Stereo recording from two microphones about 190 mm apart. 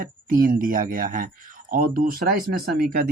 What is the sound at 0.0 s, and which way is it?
Speech, 45° right (ahead or behind).